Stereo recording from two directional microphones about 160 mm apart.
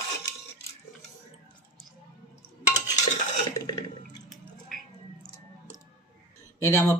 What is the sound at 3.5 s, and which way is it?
Water, 25° left (ahead or behind).